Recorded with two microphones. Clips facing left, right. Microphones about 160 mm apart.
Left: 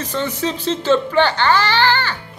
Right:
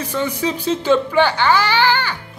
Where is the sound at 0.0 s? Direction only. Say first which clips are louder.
Right 1 dB; 10° right (ahead or behind).